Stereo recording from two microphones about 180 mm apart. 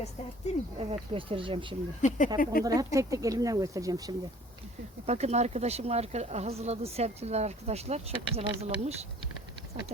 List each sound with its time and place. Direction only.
0.5 s speech: 40° left (ahead or behind)
0.8 s speech: 30° right (ahead or behind)
2.0 s speech: 45° left (ahead or behind)
2.6 s speech: 20° right (ahead or behind)
5.0 s speech: 35° right (ahead or behind)